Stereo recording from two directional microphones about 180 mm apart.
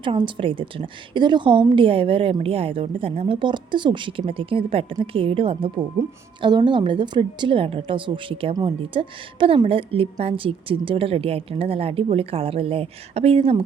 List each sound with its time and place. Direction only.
0.0 s a woman's voice: 25° right (ahead or behind)